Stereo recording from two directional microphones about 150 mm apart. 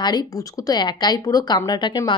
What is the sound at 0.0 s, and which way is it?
Speech, 25° left (ahead or behind).